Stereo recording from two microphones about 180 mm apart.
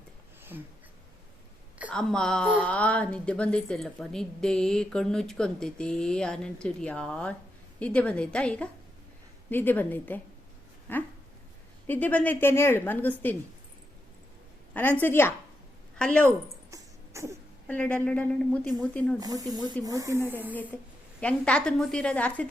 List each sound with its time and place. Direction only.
1.9 s a woman's voice: 5° left (ahead or behind)
14.7 s a woman's voice: 10° left (ahead or behind)
16.7 s a sound: 15° right (ahead or behind)
17.7 s a woman's voice: 5° left (ahead or behind)
19.2 s speech: 20° right (ahead or behind)
21.2 s a woman's voice: 5° left (ahead or behind)